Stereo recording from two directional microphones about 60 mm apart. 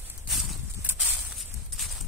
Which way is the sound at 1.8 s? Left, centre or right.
Centre.